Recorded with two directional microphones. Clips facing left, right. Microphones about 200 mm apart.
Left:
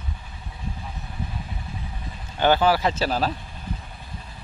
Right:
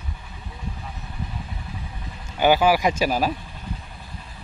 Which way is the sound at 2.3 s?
10° right (ahead or behind).